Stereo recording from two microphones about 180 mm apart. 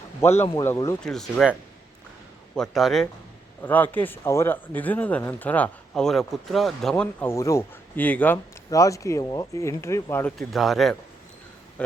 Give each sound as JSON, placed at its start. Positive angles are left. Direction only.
{"t": 0.2, "sound": "speech", "side_deg": 15}
{"t": 1.0, "sound": "speech", "side_deg": 0}
{"t": 2.6, "sound": "speech", "side_deg": 0}
{"t": 10.3, "sound": "speech", "side_deg": 0}